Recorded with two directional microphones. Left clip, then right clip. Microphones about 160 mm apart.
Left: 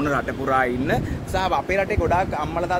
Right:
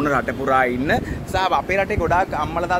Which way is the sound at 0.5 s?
20° right (ahead or behind).